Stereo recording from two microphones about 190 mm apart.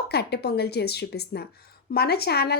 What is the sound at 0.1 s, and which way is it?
A woman's voice, 60° left (ahead or behind).